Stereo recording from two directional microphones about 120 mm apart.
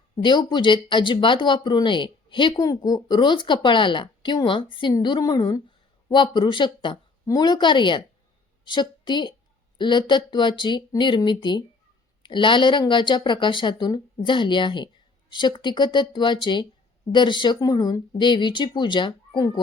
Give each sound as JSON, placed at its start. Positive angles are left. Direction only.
{"t": 0.2, "sound": "a woman's voice", "side_deg": 40}